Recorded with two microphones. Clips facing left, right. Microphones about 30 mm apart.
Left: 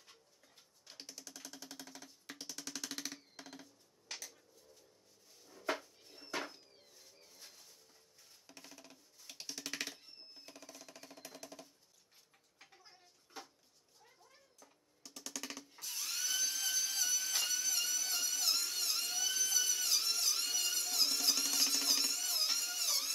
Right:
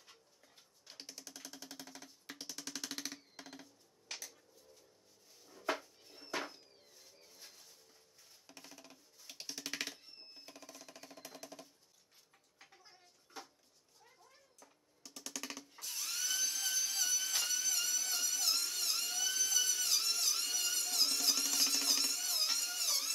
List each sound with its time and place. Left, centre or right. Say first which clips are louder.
0.8 s music: even; centre
5.4 s dishes: right 1 dB; centre
8.5 s a sound: even; centre
14.0 s drum: right 1 dB; centre